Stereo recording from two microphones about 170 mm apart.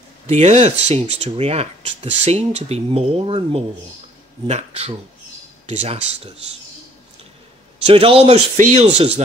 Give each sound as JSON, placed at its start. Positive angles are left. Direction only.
{"t": 0.3, "sound": "speech", "side_deg": -40}
{"t": 7.8, "sound": "speech", "side_deg": -35}